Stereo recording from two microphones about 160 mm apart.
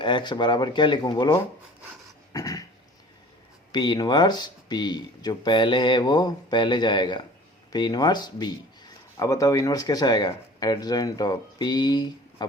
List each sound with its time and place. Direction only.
0.0 s speech: 30° left (ahead or behind)
2.3 s dog: 20° left (ahead or behind)
3.7 s speech: 25° left (ahead or behind)